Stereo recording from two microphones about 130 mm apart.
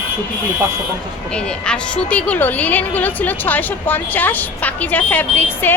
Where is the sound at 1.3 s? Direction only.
10° left (ahead or behind).